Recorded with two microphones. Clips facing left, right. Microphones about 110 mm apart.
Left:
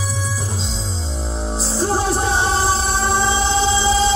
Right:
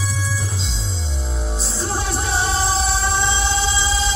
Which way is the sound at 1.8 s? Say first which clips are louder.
Left 6 dB; 40° left (ahead or behind).